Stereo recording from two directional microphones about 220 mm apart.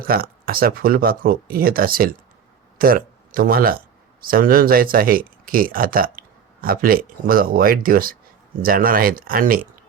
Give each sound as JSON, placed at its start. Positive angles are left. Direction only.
{"t": 0.1, "sound": "speech", "side_deg": -40}